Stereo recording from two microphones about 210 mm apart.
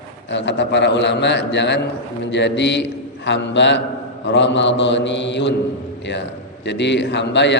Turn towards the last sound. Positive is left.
turn(degrees=55)  # may be behind; listen again after turning